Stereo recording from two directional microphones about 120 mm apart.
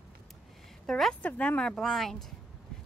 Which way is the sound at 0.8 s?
Centre (ahead or behind).